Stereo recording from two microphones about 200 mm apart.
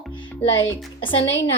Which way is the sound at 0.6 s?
75° left (ahead or behind).